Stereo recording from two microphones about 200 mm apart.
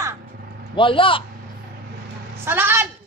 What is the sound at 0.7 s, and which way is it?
Speech, 25° left (ahead or behind).